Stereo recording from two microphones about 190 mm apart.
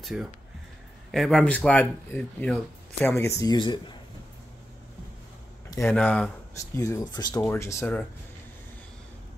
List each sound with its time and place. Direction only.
0.0 s speech: centre (ahead or behind); by 3.9 s 25° left (ahead or behind)
5.7 s speech: 15° left (ahead or behind)
6.8 s speech: 20° left (ahead or behind)